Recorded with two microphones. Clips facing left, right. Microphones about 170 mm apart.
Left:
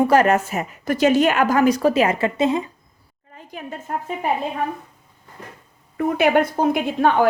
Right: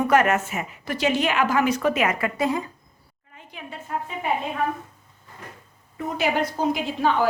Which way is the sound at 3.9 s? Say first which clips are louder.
Left 2 dB; 50° left (ahead or behind).